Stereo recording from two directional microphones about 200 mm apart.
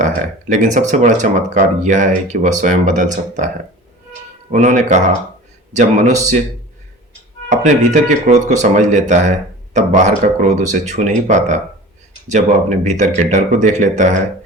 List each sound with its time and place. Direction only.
0.0 s speech: 40° right (ahead or behind)
4.5 s speech: 35° right (ahead or behind)
7.5 s speech: 35° right (ahead or behind)